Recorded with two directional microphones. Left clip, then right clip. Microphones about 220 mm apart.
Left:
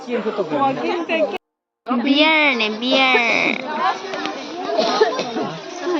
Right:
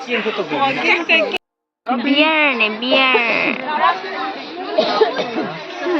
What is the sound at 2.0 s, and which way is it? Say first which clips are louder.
Speech: even; 10° left (ahead or behind).